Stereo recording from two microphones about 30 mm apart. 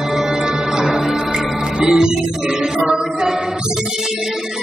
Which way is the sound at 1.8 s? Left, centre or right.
Right.